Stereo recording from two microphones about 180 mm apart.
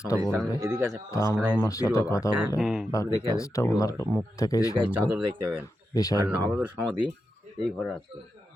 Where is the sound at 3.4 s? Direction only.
20° left (ahead or behind).